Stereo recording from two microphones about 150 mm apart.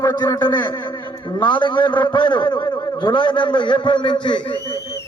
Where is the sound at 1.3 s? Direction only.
30° left (ahead or behind).